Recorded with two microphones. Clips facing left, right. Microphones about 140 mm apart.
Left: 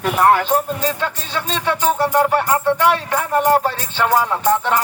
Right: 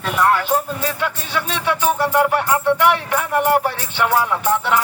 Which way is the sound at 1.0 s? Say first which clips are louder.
Right 1 dB; 10° right (ahead or behind).